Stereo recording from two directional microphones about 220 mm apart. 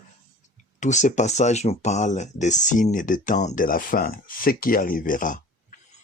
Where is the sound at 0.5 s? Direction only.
35° left (ahead or behind).